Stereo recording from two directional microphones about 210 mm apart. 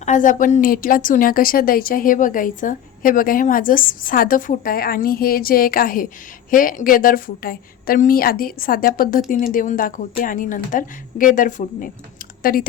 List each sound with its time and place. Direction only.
0.0 s a woman's voice: 35° left (ahead or behind)